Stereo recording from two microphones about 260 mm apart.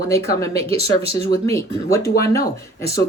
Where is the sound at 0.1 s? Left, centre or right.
Centre.